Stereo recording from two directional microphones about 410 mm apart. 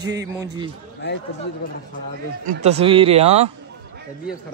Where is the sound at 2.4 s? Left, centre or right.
Centre.